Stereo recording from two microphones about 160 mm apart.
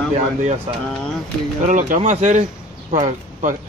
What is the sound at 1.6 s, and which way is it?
Speech, 50° right (ahead or behind).